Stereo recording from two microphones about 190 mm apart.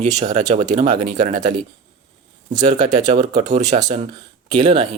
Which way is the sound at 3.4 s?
40° right (ahead or behind).